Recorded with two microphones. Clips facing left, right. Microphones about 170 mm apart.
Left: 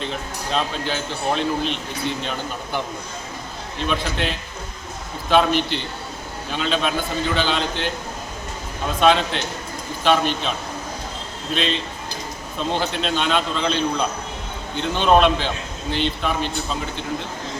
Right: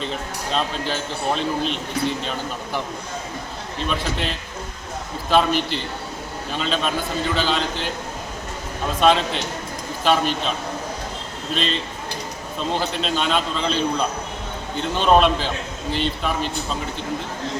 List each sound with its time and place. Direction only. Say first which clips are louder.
0.5 s a man's voice: even; centre (ahead or behind)
3.8 s a man's voice: left 2 dB; centre (ahead or behind)
9.0 s a man's voice: even; centre (ahead or behind)
11.5 s a man's voice: left 1 dB; centre (ahead or behind)
12.9 s a man's voice: even; centre (ahead or behind)